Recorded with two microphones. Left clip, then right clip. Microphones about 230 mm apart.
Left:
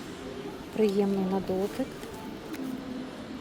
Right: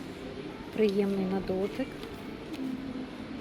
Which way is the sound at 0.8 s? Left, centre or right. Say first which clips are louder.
Left 1 dB; centre.